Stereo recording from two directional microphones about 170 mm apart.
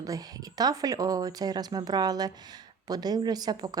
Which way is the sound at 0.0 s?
20° right (ahead or behind).